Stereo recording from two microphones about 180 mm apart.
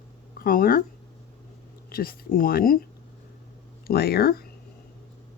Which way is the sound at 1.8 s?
55° left (ahead or behind).